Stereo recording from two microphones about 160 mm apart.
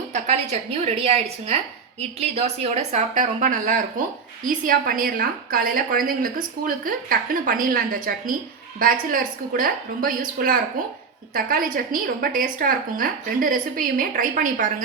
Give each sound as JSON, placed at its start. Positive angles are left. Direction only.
{"t": 0.1, "sound": "a woman's voice", "side_deg": -45}